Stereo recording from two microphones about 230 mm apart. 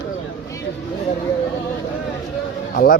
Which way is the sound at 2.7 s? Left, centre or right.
Left.